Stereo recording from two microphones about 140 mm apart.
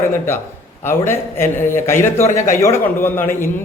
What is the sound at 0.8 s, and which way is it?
A man's voice, 15° left (ahead or behind).